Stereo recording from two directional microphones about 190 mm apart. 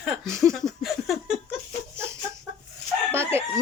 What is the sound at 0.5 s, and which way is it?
Laughter, centre (ahead or behind).